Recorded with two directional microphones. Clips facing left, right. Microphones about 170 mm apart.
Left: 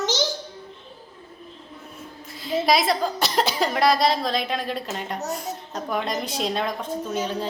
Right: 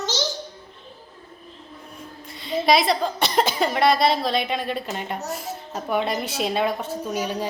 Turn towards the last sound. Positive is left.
turn(degrees=-10)  # may be behind; listen again after turning